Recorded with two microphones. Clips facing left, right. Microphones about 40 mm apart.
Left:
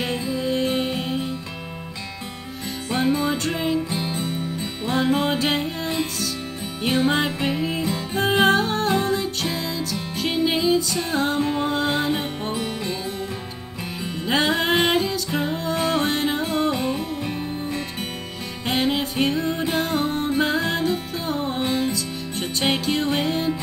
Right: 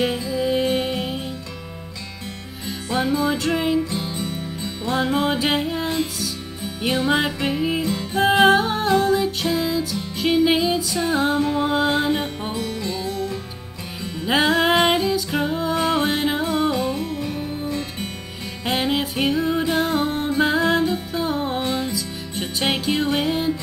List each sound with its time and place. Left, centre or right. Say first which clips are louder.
0.4 s music: right 3 dB; centre
3.3 s music: right 2 dB; centre
4.9 s music: even; centre
7.1 s music: right 1 dB; centre
12.5 s music: right 1 dB; left
14.2 s music: right 3 dB; centre
16.7 s music: right 1 dB; centre
18.7 s music: right 1 dB; centre